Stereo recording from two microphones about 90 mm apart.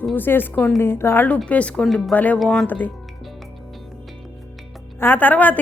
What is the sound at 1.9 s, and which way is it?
Speech, centre (ahead or behind).